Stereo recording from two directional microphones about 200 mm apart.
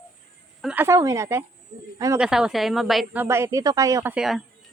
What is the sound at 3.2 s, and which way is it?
Speech, 15° right (ahead or behind).